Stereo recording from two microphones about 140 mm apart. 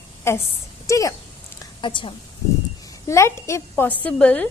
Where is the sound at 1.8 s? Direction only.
35° left (ahead or behind).